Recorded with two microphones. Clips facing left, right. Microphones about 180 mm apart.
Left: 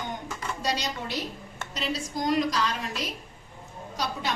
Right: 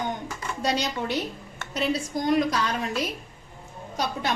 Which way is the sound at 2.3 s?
55° right (ahead or behind).